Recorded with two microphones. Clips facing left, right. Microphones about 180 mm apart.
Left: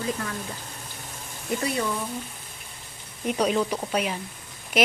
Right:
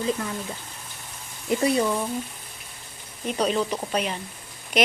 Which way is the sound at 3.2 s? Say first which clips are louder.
Left 1 dB; 10° left (ahead or behind).